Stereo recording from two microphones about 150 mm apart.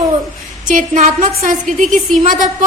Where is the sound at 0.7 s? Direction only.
55° right (ahead or behind).